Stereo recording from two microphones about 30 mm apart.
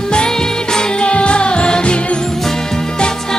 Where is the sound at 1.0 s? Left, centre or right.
Left.